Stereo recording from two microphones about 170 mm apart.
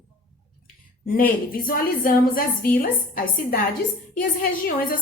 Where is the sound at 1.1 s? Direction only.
55° left (ahead or behind).